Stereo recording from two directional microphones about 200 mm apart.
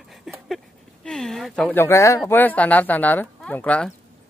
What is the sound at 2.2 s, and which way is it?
Speech, 10° left (ahead or behind).